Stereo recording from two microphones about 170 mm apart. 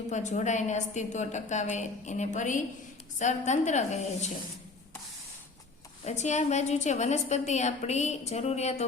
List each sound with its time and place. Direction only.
0.1 s a woman's voice: 45° left (ahead or behind)
6.1 s a woman's voice: 45° left (ahead or behind)